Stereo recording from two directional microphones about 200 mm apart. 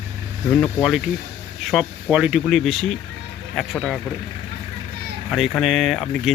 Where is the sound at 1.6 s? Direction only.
Centre (ahead or behind).